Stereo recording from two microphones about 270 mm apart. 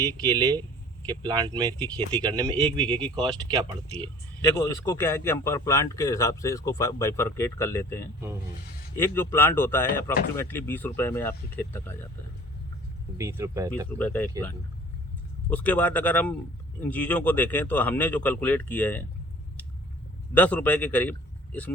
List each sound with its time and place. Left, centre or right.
0.3 s speech: centre
4.4 s a man's voice: centre
13.1 s speech: centre
14.0 s a man's voice: centre
15.4 s a man's voice: centre
20.3 s a man's voice: centre